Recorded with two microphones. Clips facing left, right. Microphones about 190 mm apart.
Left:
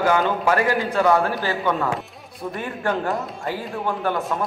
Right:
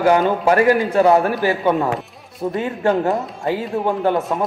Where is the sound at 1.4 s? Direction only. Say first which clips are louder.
Right 5 dB; 20° right (ahead or behind).